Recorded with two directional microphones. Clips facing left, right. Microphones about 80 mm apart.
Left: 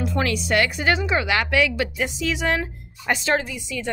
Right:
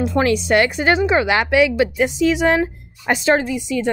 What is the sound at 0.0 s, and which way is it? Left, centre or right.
Speech, right.